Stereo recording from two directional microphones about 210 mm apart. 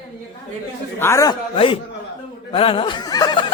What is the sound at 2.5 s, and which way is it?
Snicker, 25° left (ahead or behind).